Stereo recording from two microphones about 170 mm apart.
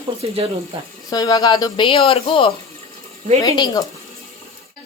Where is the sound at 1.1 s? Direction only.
20° left (ahead or behind).